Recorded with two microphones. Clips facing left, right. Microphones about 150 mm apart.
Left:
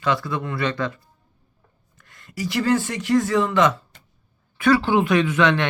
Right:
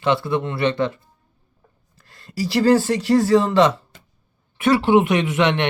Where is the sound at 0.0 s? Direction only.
25° right (ahead or behind).